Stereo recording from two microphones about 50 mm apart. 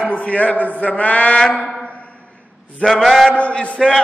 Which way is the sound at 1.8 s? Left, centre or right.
Left.